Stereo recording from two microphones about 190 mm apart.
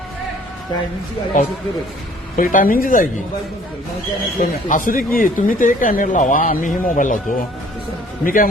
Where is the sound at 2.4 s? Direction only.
45° left (ahead or behind).